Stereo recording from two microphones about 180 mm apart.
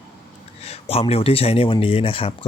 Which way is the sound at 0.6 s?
35° left (ahead or behind).